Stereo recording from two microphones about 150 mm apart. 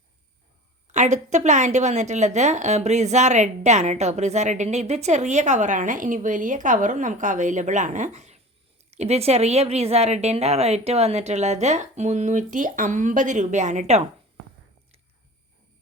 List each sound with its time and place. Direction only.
0.9 s speech: 50° right (ahead or behind)